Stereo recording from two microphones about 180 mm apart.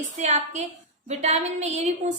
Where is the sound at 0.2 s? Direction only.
40° right (ahead or behind).